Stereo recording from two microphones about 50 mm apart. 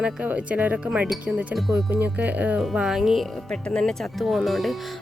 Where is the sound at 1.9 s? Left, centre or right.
Right.